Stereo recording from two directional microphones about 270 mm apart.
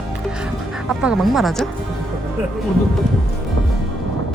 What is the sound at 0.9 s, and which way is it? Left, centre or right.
Speech, centre.